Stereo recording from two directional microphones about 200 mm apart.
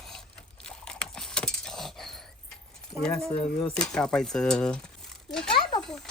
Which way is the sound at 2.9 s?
Centre (ahead or behind).